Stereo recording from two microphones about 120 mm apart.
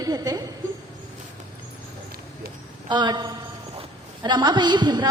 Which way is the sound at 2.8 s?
40° right (ahead or behind).